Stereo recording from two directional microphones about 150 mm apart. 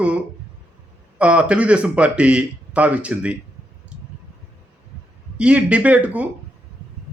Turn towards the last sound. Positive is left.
turn(degrees=-10)  # may be behind; listen again after turning